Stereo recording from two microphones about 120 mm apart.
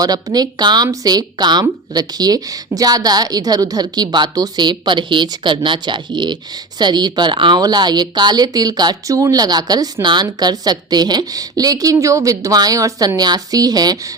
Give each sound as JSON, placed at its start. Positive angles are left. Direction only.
{"t": 0.0, "sound": "a woman's voice", "side_deg": -30}